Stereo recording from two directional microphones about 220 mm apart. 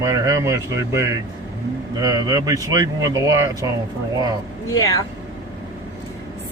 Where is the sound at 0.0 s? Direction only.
15° right (ahead or behind).